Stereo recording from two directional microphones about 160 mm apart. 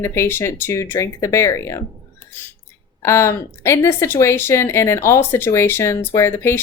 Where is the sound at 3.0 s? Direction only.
15° left (ahead or behind).